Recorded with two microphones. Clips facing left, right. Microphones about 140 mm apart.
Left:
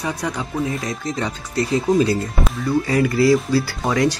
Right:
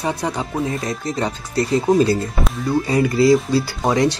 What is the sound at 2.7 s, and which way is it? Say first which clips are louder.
Speech: right 1 dB; 25° right (ahead or behind).